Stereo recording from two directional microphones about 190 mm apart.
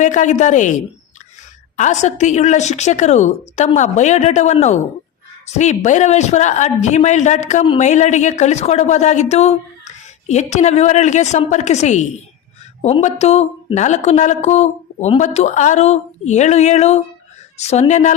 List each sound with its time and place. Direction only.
0.0 s a man's voice: 40° left (ahead or behind)